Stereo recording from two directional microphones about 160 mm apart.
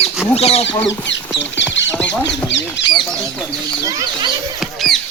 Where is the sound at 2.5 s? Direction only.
90° left.